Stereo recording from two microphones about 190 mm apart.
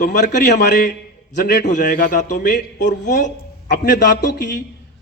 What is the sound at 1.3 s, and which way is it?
A man's voice, 40° left (ahead or behind).